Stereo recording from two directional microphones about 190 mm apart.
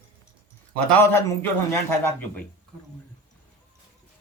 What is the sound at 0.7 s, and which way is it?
A man's voice, 10° left (ahead or behind).